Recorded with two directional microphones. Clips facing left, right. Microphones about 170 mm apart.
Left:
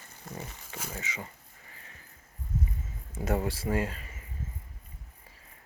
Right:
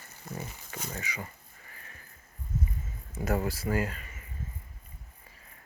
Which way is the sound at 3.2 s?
25° left (ahead or behind).